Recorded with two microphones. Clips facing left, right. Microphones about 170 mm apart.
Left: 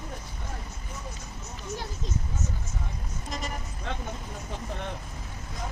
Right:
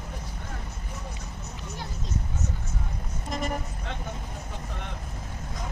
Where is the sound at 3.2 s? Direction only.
55° right (ahead or behind).